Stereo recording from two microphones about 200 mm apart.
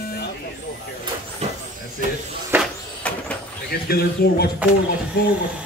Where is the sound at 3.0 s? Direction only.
5° left (ahead or behind).